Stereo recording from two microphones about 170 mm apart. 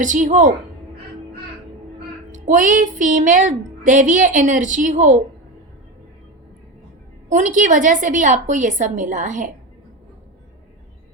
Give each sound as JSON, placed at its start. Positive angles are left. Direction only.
{"t": 0.0, "sound": "speech", "side_deg": -50}
{"t": 2.3, "sound": "speech", "side_deg": -50}
{"t": 7.3, "sound": "speech", "side_deg": -45}